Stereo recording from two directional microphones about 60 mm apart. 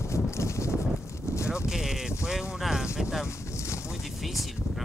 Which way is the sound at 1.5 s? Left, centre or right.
Centre.